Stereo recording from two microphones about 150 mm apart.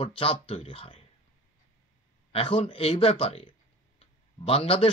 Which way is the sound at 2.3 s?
40° left (ahead or behind).